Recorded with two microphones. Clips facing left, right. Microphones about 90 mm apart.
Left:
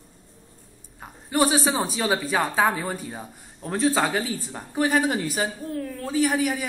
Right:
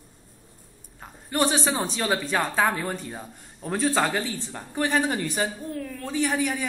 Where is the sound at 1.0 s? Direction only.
5° left (ahead or behind).